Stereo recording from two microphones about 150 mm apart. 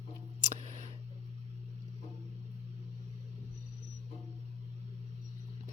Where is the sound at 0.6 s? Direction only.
50° right (ahead or behind).